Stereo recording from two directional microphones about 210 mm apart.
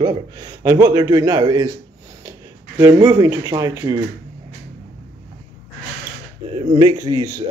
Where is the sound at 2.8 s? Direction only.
15° right (ahead or behind).